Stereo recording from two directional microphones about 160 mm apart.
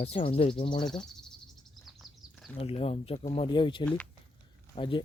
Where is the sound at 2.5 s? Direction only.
40° left (ahead or behind).